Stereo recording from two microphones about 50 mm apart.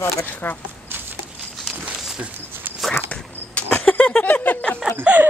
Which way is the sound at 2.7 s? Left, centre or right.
Right.